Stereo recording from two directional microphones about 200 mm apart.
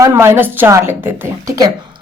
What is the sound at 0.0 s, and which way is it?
A woman's voice, 15° right (ahead or behind).